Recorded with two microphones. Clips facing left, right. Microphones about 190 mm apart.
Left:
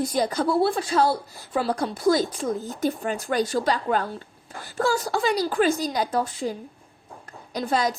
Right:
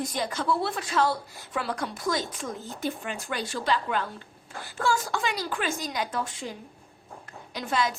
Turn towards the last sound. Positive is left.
turn(degrees=35)  # may be behind; listen again after turning